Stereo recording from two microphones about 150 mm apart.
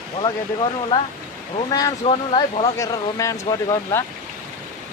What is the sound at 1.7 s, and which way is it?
Speech, 30° left (ahead or behind).